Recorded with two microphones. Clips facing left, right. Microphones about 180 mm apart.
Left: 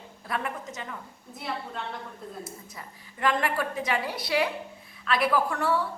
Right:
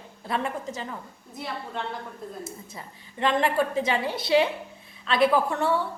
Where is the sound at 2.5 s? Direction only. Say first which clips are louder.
Right 3 dB; 25° right (ahead or behind).